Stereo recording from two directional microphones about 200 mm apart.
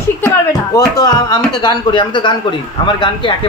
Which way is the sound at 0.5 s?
20° left (ahead or behind).